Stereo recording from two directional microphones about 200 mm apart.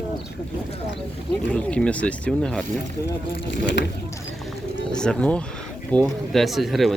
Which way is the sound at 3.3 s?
60° left (ahead or behind).